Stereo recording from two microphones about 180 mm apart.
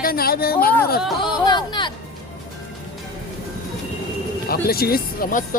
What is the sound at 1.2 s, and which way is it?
Speech, 25° left (ahead or behind).